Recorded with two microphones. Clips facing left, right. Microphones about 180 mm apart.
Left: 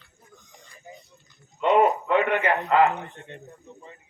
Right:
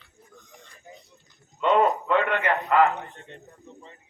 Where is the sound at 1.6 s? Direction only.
15° left (ahead or behind).